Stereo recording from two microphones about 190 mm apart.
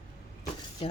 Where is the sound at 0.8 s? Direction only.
30° left (ahead or behind).